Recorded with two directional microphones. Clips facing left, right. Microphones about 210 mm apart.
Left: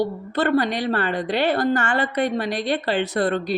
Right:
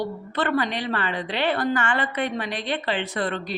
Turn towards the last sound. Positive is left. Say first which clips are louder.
# left 6 dB
turn(degrees=40)  # may be behind; listen again after turning